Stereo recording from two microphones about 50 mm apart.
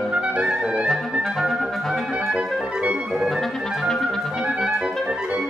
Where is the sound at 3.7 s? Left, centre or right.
Centre.